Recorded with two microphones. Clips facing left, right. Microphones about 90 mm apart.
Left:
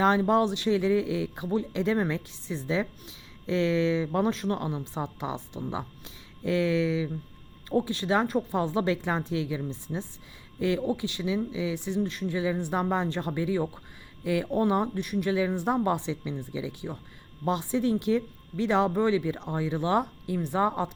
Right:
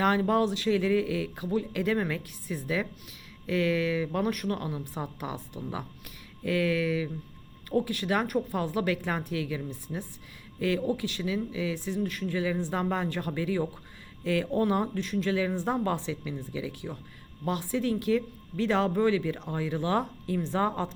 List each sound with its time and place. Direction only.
0.0 s speech: 20° left (ahead or behind)